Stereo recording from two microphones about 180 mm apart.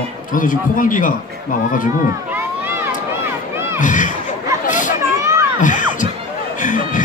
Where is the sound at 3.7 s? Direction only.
45° left (ahead or behind).